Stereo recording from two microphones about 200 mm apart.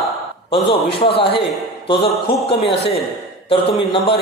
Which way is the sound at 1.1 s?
25° left (ahead or behind).